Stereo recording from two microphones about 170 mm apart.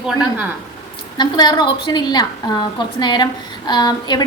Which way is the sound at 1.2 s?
25° left (ahead or behind).